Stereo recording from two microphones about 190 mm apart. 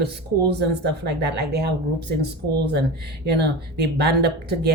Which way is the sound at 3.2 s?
60° right (ahead or behind).